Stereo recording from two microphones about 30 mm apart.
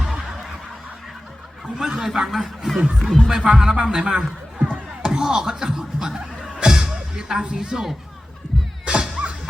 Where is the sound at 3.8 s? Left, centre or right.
Right.